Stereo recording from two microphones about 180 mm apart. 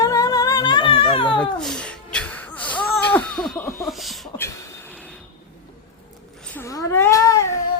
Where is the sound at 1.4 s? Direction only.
5° left (ahead or behind).